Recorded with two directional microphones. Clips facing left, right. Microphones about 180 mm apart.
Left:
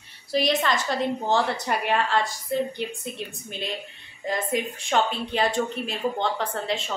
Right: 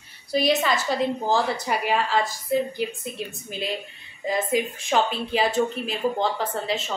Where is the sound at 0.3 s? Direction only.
5° right (ahead or behind).